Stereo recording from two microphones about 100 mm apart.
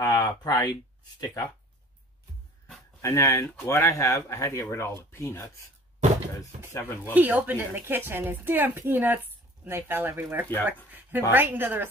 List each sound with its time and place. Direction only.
0.0 s speech: 40° left (ahead or behind)
3.0 s speech: 35° left (ahead or behind)
6.7 s speech: 25° left (ahead or behind)
7.2 s a woman's voice: 15° right (ahead or behind)